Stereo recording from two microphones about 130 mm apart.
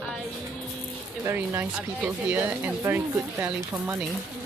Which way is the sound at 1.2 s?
20° right (ahead or behind).